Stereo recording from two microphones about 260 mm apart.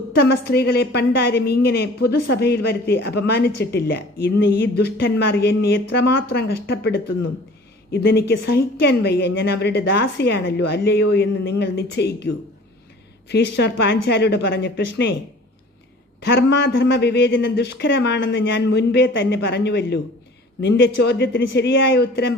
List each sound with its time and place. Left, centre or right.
0.1 s a woman's voice: left
16.2 s a woman's voice: left